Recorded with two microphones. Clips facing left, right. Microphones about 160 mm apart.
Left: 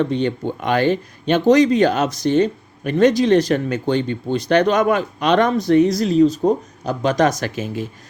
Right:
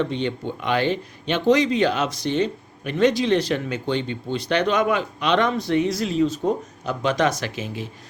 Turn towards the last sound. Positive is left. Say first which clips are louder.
# left 5 dB
turn(degrees=45)  # may be behind; listen again after turning